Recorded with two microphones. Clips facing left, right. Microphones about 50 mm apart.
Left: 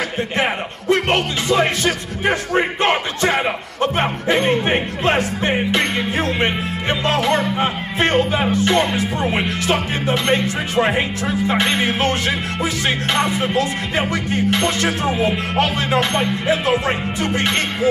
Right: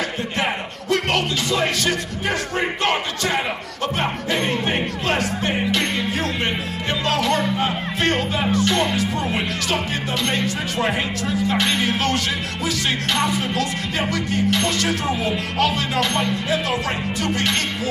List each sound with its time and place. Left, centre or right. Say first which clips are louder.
0.4 s speech: left 3 dB; left